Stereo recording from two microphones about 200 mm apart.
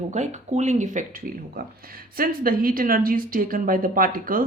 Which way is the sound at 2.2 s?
45° right (ahead or behind).